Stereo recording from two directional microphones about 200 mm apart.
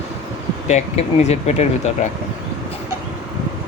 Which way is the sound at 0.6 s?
35° left (ahead or behind).